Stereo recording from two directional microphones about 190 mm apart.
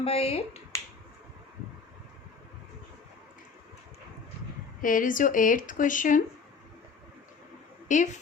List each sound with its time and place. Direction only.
0.0 s speech: 30° left (ahead or behind)
4.8 s speech: 45° left (ahead or behind)
7.9 s speech: 40° left (ahead or behind)